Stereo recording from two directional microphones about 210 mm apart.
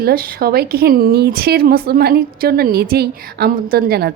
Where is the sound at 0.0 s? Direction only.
45° right (ahead or behind).